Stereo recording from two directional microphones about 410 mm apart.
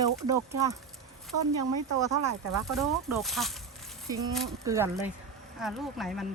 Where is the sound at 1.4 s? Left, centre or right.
Right.